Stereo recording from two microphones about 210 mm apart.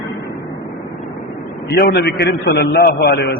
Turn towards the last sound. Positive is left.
turn(degrees=50)  # may be behind; listen again after turning